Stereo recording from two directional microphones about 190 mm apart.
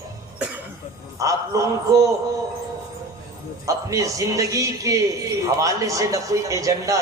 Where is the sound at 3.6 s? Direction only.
15° right (ahead or behind).